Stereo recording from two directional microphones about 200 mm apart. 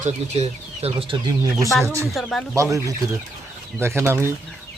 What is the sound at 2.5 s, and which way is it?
Speech, 15° right (ahead or behind).